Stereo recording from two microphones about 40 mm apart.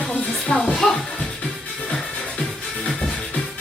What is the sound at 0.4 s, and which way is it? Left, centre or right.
Music, left.